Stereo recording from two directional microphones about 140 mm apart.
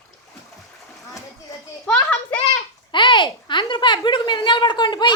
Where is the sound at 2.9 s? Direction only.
35° left (ahead or behind).